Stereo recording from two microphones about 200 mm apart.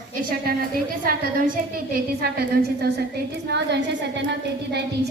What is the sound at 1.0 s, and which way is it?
A woman's voice, 45° right (ahead or behind).